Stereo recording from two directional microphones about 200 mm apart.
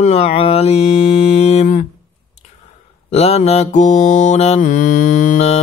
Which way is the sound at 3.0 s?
30° left (ahead or behind).